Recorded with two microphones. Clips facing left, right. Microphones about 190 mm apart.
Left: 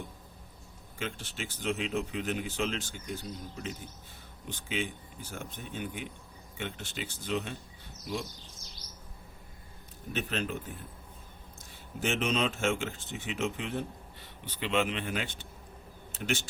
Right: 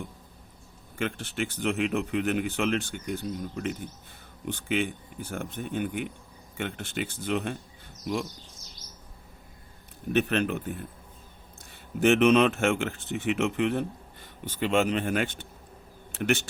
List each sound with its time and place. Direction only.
0.9 s speech: 60° right (ahead or behind)
10.1 s speech: 65° right (ahead or behind)
11.9 s speech: 65° right (ahead or behind)